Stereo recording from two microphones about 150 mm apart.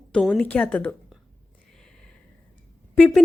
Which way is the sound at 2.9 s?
10° left (ahead or behind).